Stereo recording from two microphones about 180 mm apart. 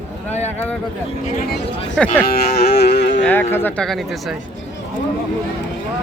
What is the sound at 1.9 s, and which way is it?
Speech, 5° left (ahead or behind).